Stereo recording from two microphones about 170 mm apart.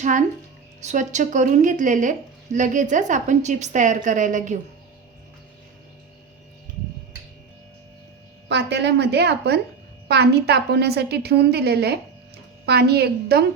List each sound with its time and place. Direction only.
0.0 s a woman's voice: 45° right (ahead or behind)
8.4 s a woman's voice: 85° right; by 13.4 s 70° right (ahead or behind)